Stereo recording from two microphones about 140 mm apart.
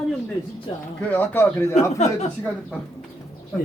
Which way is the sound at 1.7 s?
55° left (ahead or behind).